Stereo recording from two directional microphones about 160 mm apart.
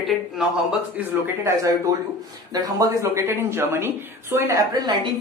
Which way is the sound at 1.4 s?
15° right (ahead or behind).